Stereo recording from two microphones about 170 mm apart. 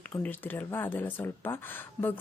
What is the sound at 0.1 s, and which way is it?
Speech, 10° left (ahead or behind).